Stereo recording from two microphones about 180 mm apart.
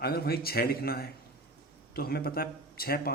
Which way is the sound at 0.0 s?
60° left (ahead or behind).